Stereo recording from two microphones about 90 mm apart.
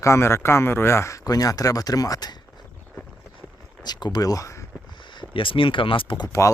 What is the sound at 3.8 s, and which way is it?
Speech, 50° left (ahead or behind).